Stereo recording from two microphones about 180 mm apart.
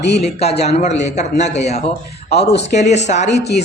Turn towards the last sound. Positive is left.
turn(degrees=40)  # may be behind; listen again after turning